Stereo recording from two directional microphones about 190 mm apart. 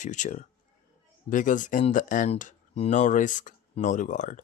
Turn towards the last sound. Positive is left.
turn(degrees=40)  # may be behind; listen again after turning